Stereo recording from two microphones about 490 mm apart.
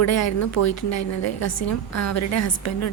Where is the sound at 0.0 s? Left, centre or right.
Left.